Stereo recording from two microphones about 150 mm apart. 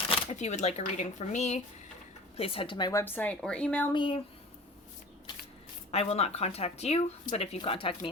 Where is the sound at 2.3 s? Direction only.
40° left (ahead or behind).